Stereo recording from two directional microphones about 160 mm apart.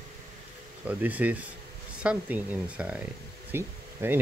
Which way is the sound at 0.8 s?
10° right (ahead or behind).